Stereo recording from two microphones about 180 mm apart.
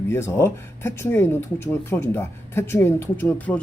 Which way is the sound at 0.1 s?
15° left (ahead or behind).